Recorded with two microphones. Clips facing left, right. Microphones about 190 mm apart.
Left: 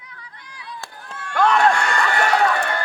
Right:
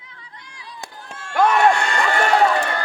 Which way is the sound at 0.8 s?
15° right (ahead or behind).